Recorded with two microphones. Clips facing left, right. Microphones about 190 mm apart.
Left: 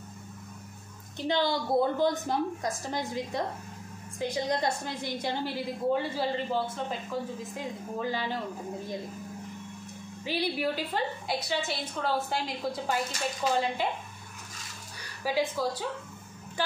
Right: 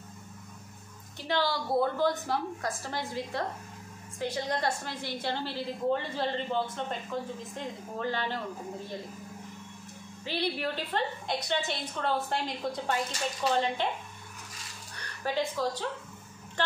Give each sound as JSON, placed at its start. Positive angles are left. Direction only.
{"t": 1.1, "sound": "a woman's voice", "side_deg": 20}
{"t": 10.2, "sound": "a woman's voice", "side_deg": 10}
{"t": 15.0, "sound": "a woman's voice", "side_deg": 10}